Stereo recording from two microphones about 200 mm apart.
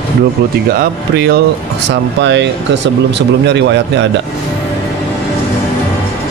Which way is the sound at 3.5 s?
60° right (ahead or behind).